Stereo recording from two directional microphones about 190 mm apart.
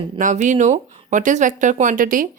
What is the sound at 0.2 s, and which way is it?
A woman's voice, 40° right (ahead or behind).